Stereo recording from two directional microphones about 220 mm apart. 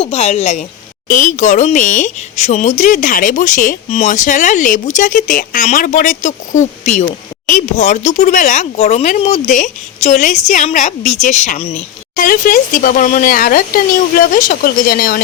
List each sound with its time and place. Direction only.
0.0 s a woman's voice: 30° left (ahead or behind)